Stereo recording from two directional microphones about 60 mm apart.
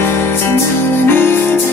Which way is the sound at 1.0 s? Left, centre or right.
Left.